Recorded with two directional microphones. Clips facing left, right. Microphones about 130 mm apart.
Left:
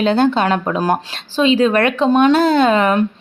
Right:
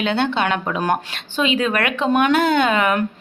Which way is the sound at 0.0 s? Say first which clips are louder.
Left 5 dB; 40° left (ahead or behind).